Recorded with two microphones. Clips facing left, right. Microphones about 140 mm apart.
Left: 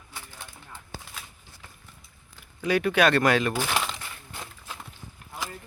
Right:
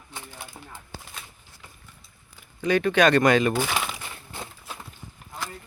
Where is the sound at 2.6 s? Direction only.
10° left (ahead or behind).